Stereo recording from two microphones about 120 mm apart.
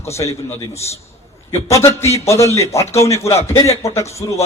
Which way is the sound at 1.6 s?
25° left (ahead or behind).